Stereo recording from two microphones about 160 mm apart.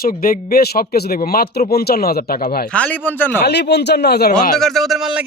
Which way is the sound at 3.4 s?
90° left.